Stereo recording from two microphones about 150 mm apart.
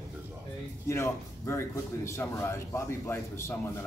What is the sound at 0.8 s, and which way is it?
A man's voice, 20° left (ahead or behind).